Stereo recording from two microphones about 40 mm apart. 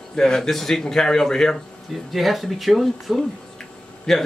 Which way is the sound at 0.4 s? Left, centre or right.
Centre.